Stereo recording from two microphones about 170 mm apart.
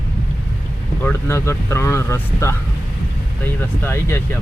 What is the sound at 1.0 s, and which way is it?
Speech, 15° left (ahead or behind).